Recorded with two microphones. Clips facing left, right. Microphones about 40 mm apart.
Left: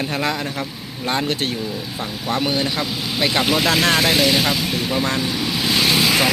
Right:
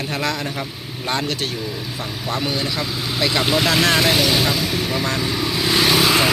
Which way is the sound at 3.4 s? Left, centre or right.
Centre.